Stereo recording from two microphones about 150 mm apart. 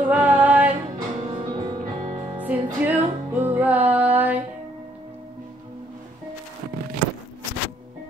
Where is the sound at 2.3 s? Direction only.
10° right (ahead or behind).